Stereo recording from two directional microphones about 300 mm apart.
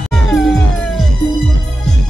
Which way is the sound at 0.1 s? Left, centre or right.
Centre.